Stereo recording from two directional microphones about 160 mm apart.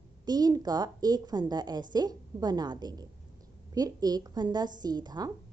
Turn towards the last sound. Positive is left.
turn(degrees=-25)  # may be behind; listen again after turning